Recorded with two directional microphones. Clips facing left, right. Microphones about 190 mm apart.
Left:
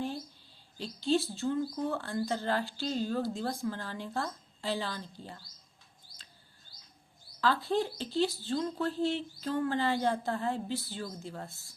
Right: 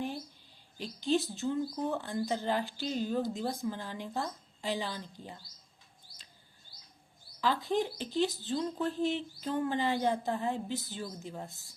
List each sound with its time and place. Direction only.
0.8 s speech: 15° right (ahead or behind)
7.4 s speech: 15° right (ahead or behind)